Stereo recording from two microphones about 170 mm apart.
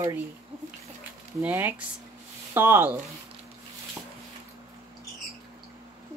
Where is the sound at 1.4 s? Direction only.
10° right (ahead or behind).